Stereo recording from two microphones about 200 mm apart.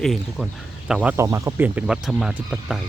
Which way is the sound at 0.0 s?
Centre (ahead or behind).